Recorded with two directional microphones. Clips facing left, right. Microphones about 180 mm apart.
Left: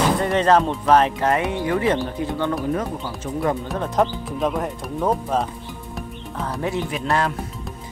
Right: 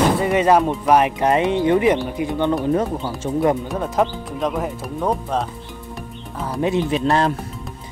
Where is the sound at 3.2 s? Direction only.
30° right (ahead or behind).